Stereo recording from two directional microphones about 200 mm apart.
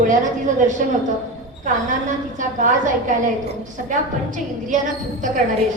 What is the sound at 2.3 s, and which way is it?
A woman's voice, 40° right (ahead or behind).